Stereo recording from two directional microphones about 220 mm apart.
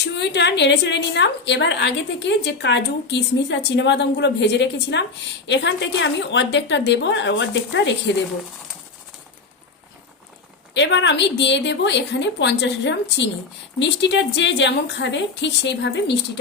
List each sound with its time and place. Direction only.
0.1 s a woman's voice: 50° left (ahead or behind)
10.8 s a woman's voice: 55° left (ahead or behind)